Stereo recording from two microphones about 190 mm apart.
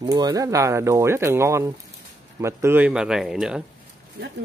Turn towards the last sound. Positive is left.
turn(degrees=-5)  # may be behind; listen again after turning